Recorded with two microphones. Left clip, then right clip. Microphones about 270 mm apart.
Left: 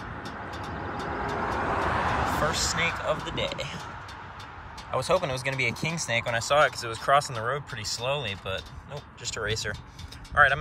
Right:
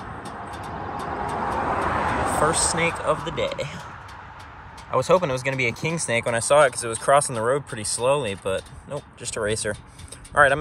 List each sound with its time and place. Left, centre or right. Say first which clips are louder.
0.6 s vehicle: right 3 dB; right
2.7 s speech: right 4 dB; centre
5.0 s speech: right 5 dB; centre